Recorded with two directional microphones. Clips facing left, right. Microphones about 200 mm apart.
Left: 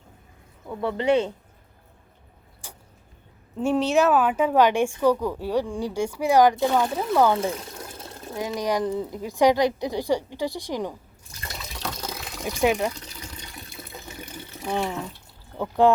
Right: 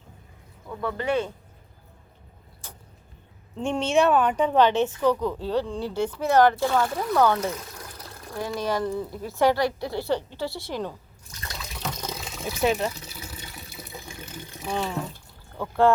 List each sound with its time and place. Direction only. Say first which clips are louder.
0.7 s speech: left 4 dB; 25° left (ahead or behind)
2.6 s a sound: left 1 dB; 10° left (ahead or behind)
3.5 s a woman's voice: left 2 dB; 5° left (ahead or behind)
12.0 s water: even; centre (ahead or behind)
12.6 s a woman's voice: left 2 dB; 15° left (ahead or behind)
12.9 s water: even; 10° right (ahead or behind)
14.5 s water: left 2 dB; 15° left (ahead or behind)
15.5 s a woman's voice: left 2 dB; 15° left (ahead or behind)